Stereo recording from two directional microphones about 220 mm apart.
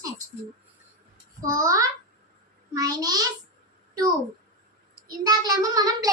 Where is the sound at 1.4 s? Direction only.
15° right (ahead or behind).